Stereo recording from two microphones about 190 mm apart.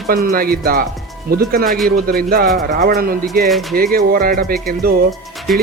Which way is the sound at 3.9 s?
50° right (ahead or behind).